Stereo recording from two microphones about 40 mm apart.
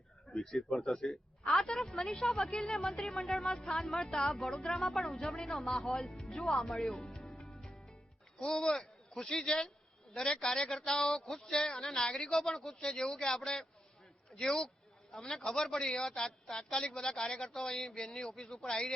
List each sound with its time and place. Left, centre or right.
0.3 s a man's voice: centre
3.8 s a man's voice: centre
5.8 s a man's voice: centre
6.4 s speech: centre
6.7 s music: centre
8.4 s a man's voice: centre